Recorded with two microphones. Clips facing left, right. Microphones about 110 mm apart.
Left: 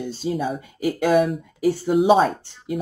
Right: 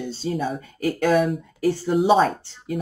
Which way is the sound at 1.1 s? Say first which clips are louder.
Left 1 dB; centre (ahead or behind).